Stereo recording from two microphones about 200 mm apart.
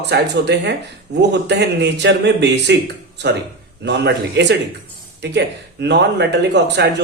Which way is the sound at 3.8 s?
60° right (ahead or behind).